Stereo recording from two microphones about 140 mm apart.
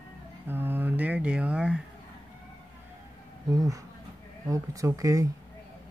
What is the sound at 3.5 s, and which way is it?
Speech, 25° right (ahead or behind).